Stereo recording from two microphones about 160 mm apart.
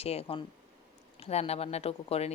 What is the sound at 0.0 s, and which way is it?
Speech, 40° left (ahead or behind).